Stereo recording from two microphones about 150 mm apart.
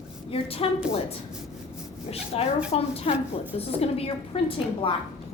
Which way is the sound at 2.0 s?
45° left (ahead or behind).